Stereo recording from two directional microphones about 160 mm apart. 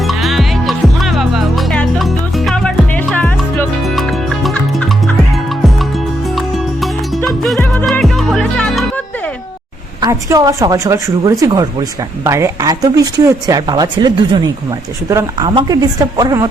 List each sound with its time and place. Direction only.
0.1 s music: centre (ahead or behind)
7.3 s music: centre (ahead or behind)
10.0 s speech: 20° right (ahead or behind)